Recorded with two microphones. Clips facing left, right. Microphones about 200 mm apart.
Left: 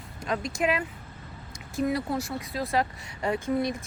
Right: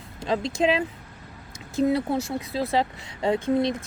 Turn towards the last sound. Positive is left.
turn(degrees=-25)  # may be behind; listen again after turning